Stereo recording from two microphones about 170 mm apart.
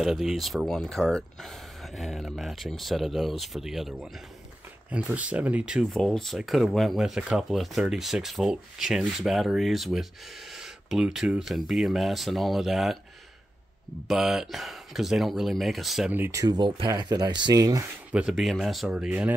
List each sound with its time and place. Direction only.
0.0 s speech: 5° right (ahead or behind)
14.0 s speech: centre (ahead or behind); by 17.8 s 20° right (ahead or behind)
18.1 s speech: centre (ahead or behind)